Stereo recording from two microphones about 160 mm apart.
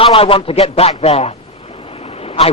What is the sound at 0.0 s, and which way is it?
A man's voice, 35° left (ahead or behind).